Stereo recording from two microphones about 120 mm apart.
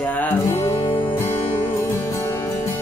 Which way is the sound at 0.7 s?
45° left (ahead or behind).